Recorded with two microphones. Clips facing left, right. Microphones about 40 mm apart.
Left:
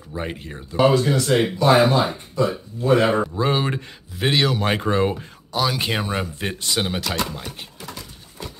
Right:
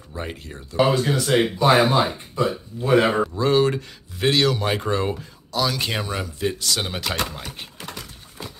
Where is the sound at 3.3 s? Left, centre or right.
Centre.